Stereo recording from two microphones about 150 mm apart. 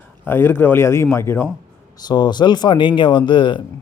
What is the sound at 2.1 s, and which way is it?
Speech, 30° left (ahead or behind).